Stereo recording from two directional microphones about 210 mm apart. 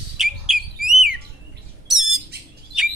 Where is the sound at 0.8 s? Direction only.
Centre (ahead or behind).